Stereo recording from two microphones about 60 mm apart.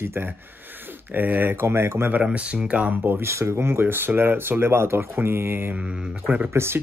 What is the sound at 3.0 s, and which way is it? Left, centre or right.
Speech, right.